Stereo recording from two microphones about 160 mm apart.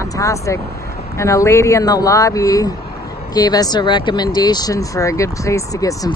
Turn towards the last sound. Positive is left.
turn(degrees=20)  # may be behind; listen again after turning